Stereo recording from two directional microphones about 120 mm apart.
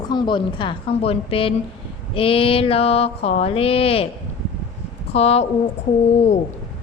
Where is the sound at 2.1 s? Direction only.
50° left (ahead or behind).